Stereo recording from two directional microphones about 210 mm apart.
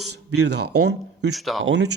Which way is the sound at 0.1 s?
90° right.